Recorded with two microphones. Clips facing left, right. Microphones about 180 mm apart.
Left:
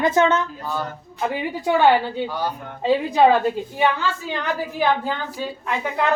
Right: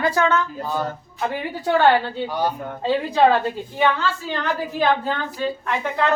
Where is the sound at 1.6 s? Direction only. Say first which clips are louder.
Even; 10° left (ahead or behind).